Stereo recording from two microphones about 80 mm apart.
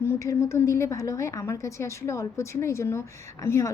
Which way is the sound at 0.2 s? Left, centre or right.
Left.